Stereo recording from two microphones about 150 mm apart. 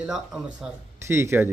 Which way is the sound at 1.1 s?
15° right (ahead or behind).